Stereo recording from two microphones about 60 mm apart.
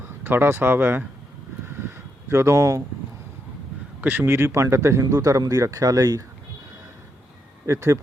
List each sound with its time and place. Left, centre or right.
0.3 s speech: right
1.6 s vehicle: right
2.3 s speech: right
4.0 s speech: right
5.1 s speech: right
7.7 s speech: right